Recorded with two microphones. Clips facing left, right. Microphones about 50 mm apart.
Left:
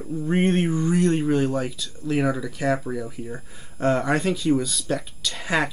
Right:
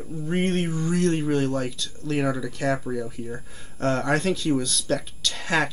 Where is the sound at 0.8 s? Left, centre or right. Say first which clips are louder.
Even; centre.